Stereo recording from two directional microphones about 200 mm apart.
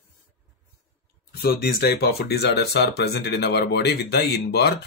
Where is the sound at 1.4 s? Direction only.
50° left (ahead or behind).